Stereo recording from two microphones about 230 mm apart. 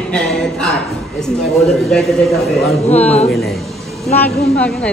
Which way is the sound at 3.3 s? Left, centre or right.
Centre.